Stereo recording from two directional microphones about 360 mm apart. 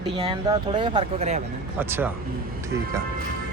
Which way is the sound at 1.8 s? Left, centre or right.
Centre.